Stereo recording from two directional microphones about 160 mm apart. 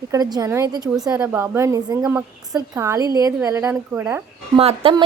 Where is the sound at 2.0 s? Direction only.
5° right (ahead or behind).